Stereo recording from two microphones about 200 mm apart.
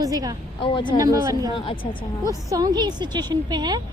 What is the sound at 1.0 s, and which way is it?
A woman's voice, 20° right (ahead or behind).